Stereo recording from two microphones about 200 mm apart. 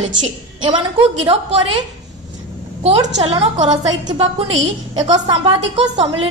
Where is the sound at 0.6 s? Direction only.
25° right (ahead or behind).